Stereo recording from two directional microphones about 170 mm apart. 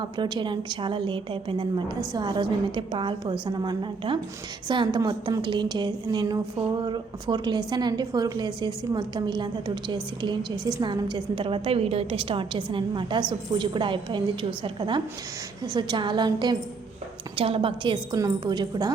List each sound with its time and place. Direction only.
0.0 s a woman's voice: 25° right (ahead or behind)